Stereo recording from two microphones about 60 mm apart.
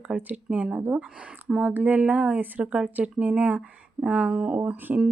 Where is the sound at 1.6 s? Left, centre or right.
Right.